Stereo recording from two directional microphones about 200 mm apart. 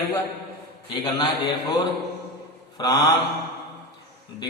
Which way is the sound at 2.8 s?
20° left (ahead or behind).